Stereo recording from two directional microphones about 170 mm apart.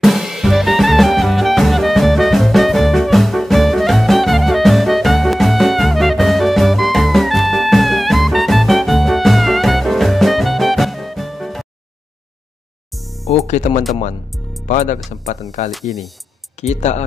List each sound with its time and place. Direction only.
0.0 s music: centre (ahead or behind)
12.9 s music: centre (ahead or behind)
13.5 s speech: 45° left (ahead or behind)
15.7 s speech: centre (ahead or behind)
16.6 s speech: 40° left (ahead or behind)